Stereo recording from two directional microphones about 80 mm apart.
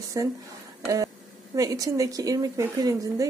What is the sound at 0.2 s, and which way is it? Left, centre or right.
A woman's voice, right.